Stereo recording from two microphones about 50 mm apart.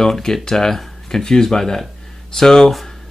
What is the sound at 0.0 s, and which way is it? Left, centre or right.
Speech, centre.